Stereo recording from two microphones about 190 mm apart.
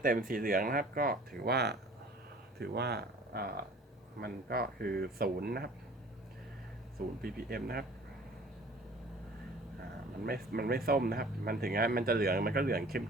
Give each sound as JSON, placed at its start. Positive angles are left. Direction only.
{"t": 0.0, "sound": "speech", "side_deg": -50}
{"t": 7.2, "sound": "speech", "side_deg": -50}
{"t": 10.2, "sound": "speech", "side_deg": -55}